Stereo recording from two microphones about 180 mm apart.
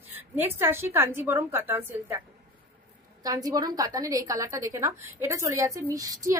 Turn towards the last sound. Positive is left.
turn(degrees=-20)  # may be behind; listen again after turning